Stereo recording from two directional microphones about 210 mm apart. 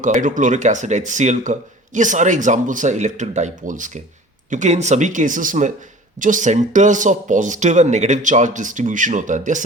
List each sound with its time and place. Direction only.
0.0 s speech: 40° right (ahead or behind)